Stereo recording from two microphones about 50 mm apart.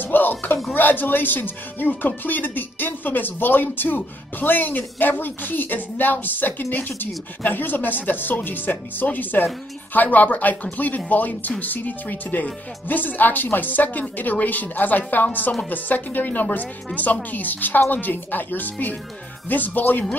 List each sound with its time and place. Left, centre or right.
0.0 s speech: left